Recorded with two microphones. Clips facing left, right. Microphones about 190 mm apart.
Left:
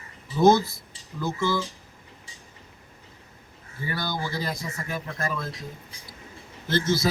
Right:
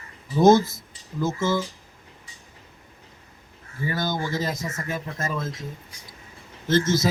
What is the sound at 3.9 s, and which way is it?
Speech, 20° right (ahead or behind).